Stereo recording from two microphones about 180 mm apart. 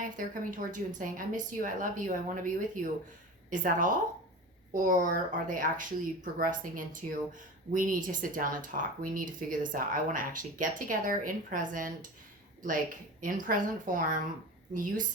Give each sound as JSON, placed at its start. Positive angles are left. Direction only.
{"t": 0.0, "sound": "speech", "side_deg": -45}
{"t": 13.2, "sound": "speech", "side_deg": -45}